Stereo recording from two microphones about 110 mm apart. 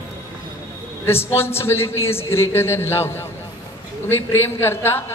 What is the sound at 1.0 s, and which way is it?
Speech, 20° left (ahead or behind).